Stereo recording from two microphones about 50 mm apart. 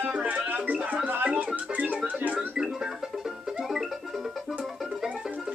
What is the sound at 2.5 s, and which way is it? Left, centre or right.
Music, centre.